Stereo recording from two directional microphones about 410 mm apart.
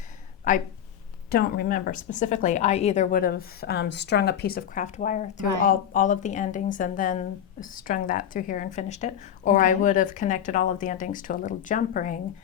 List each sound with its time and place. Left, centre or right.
0.5 s speech: centre